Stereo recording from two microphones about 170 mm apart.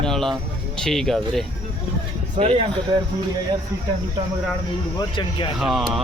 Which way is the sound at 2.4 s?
35° right (ahead or behind).